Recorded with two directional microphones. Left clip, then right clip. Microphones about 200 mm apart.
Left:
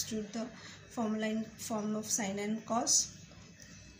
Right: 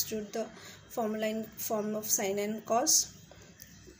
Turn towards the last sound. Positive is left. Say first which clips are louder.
# right 4 dB
turn(degrees=-45)  # may be behind; listen again after turning